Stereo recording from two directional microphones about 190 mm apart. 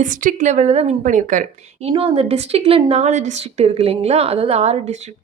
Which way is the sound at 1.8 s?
30° right (ahead or behind).